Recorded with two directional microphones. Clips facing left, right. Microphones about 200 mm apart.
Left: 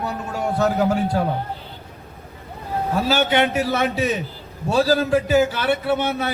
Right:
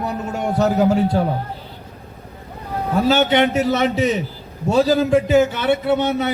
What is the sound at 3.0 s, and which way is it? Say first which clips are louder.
A man's voice: right 4 dB; 20° right (ahead or behind).